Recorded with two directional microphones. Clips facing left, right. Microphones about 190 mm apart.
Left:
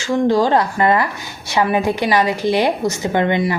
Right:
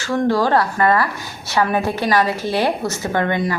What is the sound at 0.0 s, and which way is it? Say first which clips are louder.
Speech: left 2 dB; 15° left (ahead or behind).